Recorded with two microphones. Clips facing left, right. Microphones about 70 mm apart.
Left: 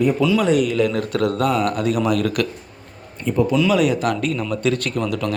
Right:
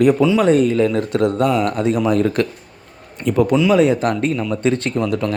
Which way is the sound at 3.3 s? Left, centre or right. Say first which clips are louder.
Right 3 dB; right.